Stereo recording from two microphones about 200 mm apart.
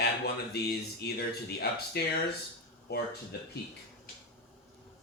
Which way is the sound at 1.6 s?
50° left (ahead or behind).